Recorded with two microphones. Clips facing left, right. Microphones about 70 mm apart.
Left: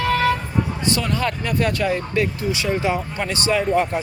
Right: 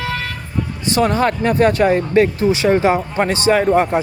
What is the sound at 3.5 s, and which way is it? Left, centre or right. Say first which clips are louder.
Speech: right 5 dB; right.